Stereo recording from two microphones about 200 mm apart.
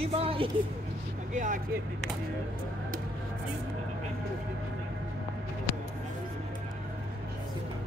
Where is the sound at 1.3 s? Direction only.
40° right (ahead or behind).